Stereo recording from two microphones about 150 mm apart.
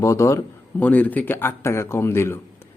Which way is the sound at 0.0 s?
20° left (ahead or behind).